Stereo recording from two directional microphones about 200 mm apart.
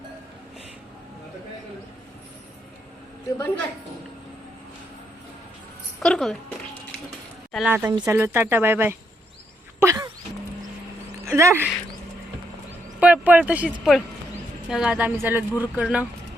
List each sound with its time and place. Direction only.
6.0 s speech: centre (ahead or behind)
7.5 s speech: 5° right (ahead or behind)
9.8 s a sound: 15° right (ahead or behind)
11.3 s speech: 15° right (ahead or behind)
13.0 s speech: 5° right (ahead or behind)